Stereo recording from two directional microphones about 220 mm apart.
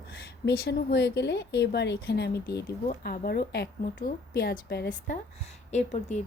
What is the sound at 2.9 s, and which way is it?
A woman's voice, 40° left (ahead or behind).